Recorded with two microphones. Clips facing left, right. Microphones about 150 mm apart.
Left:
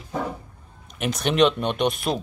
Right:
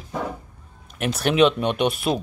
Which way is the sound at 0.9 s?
5° right (ahead or behind).